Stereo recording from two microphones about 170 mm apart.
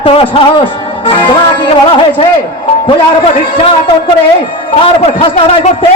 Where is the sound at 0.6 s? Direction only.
30° left (ahead or behind).